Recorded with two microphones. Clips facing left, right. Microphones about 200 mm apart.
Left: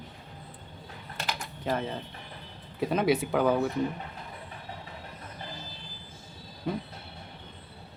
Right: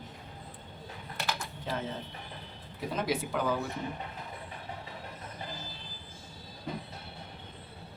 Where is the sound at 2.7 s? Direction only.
65° left (ahead or behind).